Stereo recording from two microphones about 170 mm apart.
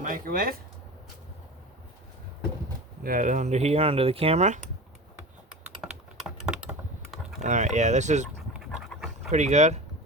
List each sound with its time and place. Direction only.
0.0 s speech: 55° right (ahead or behind)
3.0 s speech: 55° right (ahead or behind)
5.8 s typing: 5° right (ahead or behind)
7.4 s speech: 45° right (ahead or behind)
8.5 s pant: centre (ahead or behind)
9.3 s speech: 40° right (ahead or behind)